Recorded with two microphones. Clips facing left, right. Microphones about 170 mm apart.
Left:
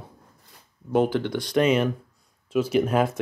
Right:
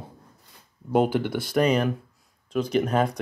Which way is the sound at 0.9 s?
10° right (ahead or behind).